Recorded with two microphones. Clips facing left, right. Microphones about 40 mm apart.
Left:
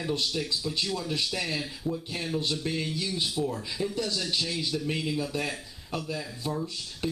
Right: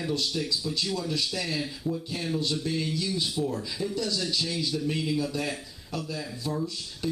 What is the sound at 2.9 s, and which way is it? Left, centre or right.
Speech, left.